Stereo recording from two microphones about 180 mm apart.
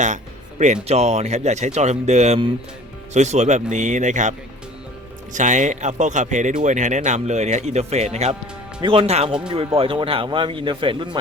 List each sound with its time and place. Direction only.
0.6 s speech: 40° right (ahead or behind)